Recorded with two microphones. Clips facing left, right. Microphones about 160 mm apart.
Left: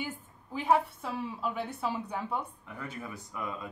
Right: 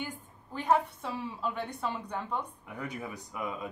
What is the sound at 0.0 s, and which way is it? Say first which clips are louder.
Speech: left 1 dB; 5° left (ahead or behind).